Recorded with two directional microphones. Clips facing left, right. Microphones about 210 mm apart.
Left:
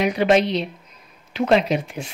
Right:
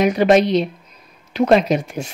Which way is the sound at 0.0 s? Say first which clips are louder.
Right 4 dB; 45° right (ahead or behind).